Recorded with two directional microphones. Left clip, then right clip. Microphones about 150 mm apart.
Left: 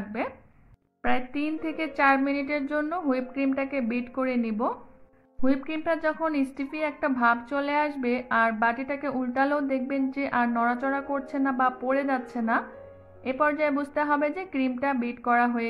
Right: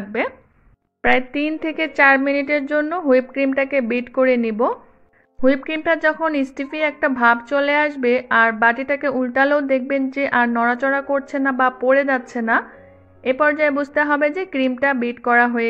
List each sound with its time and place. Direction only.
1.0 s a woman's voice: 30° right (ahead or behind)